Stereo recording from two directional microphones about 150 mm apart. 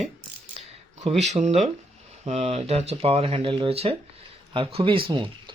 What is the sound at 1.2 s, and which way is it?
Speech, 50° right (ahead or behind).